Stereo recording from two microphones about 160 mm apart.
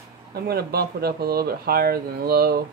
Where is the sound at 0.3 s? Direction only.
75° right (ahead or behind).